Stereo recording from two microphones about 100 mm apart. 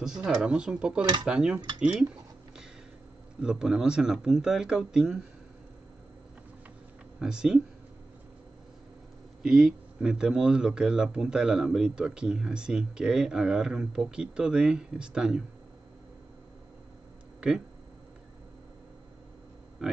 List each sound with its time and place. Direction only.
0.0 s speech: 5° right (ahead or behind)
3.4 s speech: 5° right (ahead or behind)
7.2 s speech: 5° right (ahead or behind)
9.5 s speech: 5° right (ahead or behind)
17.4 s speech: 10° right (ahead or behind)
19.8 s pig: 5° right (ahead or behind)